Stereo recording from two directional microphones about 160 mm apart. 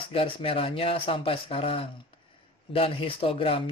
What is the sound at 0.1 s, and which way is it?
Speech, 35° left (ahead or behind).